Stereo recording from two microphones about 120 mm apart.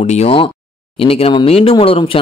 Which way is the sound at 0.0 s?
75° left (ahead or behind).